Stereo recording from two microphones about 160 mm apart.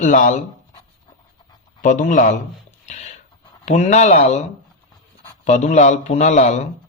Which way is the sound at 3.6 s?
45° left (ahead or behind).